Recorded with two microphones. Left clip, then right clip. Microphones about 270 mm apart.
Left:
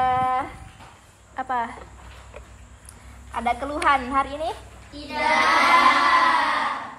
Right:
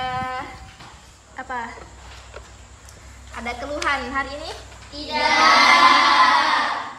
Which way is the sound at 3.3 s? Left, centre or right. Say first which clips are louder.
Left 4 dB; centre.